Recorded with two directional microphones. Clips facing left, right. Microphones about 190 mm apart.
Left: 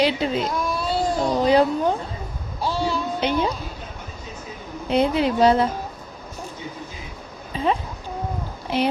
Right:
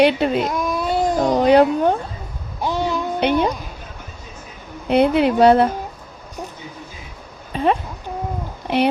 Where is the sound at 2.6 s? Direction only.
20° right (ahead or behind).